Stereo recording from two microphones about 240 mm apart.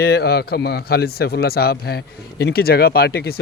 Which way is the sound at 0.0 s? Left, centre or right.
Left.